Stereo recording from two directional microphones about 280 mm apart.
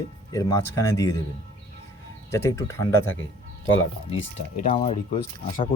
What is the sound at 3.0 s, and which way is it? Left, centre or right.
Speech, left.